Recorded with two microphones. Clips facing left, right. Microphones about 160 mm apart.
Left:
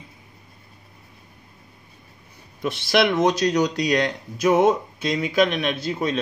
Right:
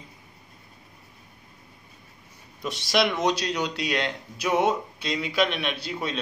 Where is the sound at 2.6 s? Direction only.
60° left (ahead or behind).